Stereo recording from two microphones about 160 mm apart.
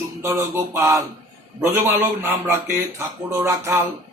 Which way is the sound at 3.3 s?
15° right (ahead or behind).